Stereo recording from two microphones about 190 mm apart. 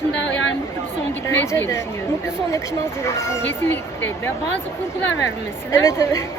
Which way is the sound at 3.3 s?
10° left (ahead or behind).